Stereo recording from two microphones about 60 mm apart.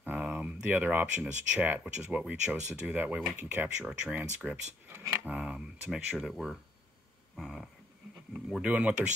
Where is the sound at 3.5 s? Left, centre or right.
Right.